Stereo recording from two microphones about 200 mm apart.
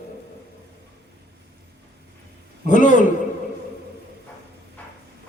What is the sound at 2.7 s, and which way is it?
Speech, 40° left (ahead or behind).